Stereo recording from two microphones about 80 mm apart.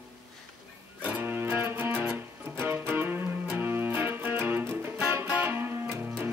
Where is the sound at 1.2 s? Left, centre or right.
Right.